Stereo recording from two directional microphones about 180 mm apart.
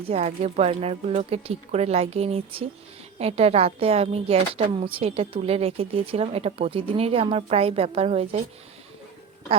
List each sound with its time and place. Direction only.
0.1 s speech: 40° right (ahead or behind)